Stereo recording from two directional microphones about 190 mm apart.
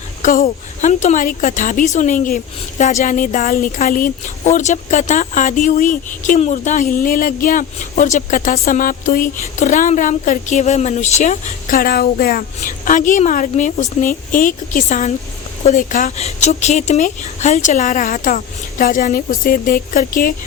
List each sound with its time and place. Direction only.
0.2 s a woman's voice: 45° left (ahead or behind)